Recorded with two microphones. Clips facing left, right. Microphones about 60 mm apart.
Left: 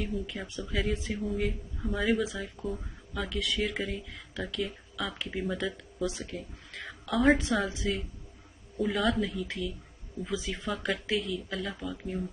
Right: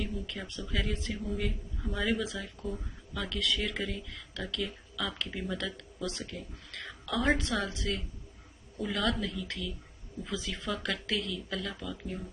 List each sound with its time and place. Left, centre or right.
0.1 s speech: centre
8.7 s a woman's voice: centre
9.3 s speech: centre
10.7 s speech: centre
11.4 s speech: centre
11.8 s speech: centre